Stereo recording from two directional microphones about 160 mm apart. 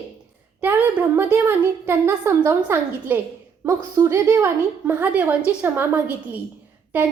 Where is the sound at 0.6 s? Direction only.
10° right (ahead or behind).